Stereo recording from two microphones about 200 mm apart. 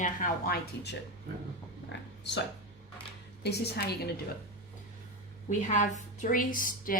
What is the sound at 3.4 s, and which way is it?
Speech, 55° left (ahead or behind).